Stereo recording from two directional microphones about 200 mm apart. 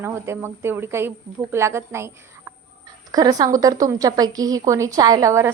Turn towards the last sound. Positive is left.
turn(degrees=-15)  # may be behind; listen again after turning